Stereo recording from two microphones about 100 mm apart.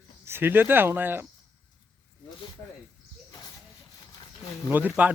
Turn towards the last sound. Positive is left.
turn(degrees=-15)  # may be behind; listen again after turning